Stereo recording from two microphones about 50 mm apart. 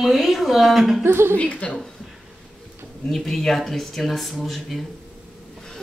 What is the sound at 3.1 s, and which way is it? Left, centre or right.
Speech, centre.